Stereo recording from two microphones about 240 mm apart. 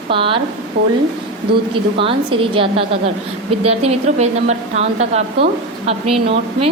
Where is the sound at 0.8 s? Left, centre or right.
Right.